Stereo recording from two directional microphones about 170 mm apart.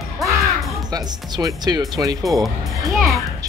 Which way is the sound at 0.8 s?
25° right (ahead or behind).